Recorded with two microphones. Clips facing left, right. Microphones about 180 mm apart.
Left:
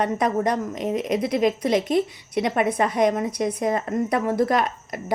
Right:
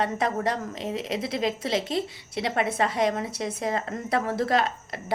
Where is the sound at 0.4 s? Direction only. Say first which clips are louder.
Left 5 dB; 15° left (ahead or behind).